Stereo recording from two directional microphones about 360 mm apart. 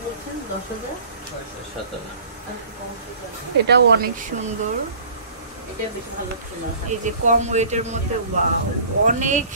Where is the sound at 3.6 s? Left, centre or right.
Right.